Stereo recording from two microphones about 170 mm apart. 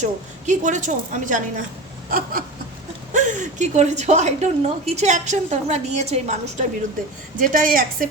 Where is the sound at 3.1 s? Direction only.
45° right (ahead or behind).